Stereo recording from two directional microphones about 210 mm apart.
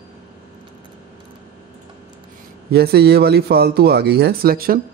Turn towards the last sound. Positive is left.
turn(degrees=-45)  # may be behind; listen again after turning